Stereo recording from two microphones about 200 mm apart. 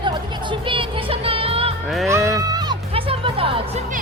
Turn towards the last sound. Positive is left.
turn(degrees=-30)  # may be behind; listen again after turning